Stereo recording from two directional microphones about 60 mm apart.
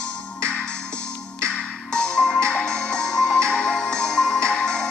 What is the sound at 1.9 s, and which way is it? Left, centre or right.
Music, centre.